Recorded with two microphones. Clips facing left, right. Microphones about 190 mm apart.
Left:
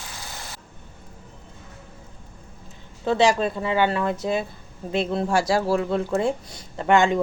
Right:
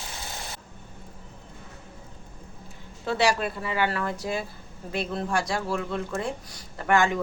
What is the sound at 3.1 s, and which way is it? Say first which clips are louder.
Speech: left 5 dB; 20° left (ahead or behind).